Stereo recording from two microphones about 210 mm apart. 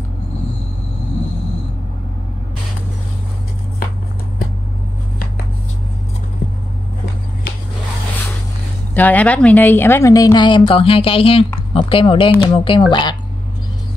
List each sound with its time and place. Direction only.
8.9 s a woman's voice: 10° left (ahead or behind); by 13.1 s 25° left (ahead or behind)